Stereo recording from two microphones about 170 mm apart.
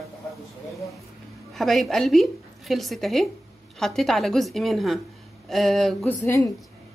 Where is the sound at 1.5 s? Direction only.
Centre (ahead or behind).